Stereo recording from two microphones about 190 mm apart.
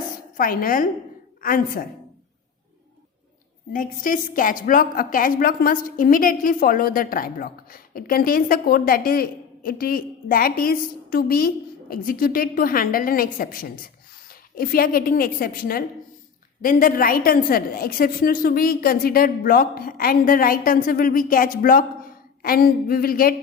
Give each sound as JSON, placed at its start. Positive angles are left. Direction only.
{"t": 0.3, "sound": "a woman's voice", "side_deg": 50}
{"t": 3.7, "sound": "a woman's voice", "side_deg": 45}